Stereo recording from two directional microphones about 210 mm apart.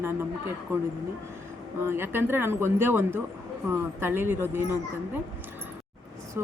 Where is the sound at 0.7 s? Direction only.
10° right (ahead or behind).